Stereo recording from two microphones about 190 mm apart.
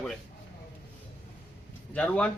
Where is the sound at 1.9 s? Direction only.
5° left (ahead or behind).